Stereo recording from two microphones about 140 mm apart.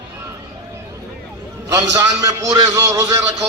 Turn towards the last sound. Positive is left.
turn(degrees=-25)  # may be behind; listen again after turning